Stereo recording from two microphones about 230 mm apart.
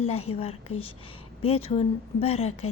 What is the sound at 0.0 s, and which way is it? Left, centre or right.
Speech, left.